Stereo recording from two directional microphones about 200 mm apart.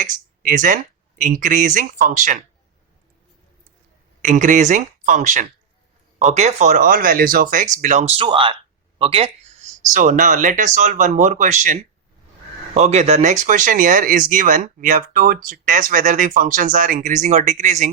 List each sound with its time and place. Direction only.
0.0 s speech: 40° right (ahead or behind)
4.2 s speech: 40° right (ahead or behind)
9.9 s speech: 40° right (ahead or behind)